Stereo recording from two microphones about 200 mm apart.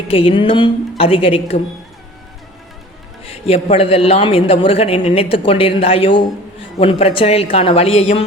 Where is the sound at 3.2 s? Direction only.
30° left (ahead or behind).